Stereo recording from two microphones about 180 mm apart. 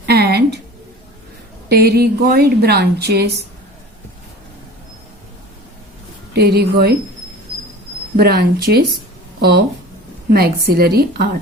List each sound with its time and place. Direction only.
0.0 s a sound: 60° right (ahead or behind)
1.7 s a woman's voice: 60° right (ahead or behind)
6.3 s a woman's voice: 60° right (ahead or behind)
8.1 s a woman's voice: 60° right (ahead or behind)
10.3 s a woman's voice: 60° right (ahead or behind)